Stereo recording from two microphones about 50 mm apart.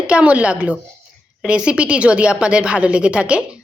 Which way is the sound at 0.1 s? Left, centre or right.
Right.